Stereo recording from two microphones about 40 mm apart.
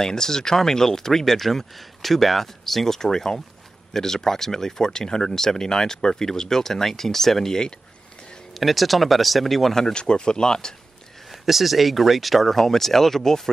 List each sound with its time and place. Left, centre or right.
0.0 s speech: centre
8.5 s speech: centre
9.9 s speech: left
11.4 s speech: centre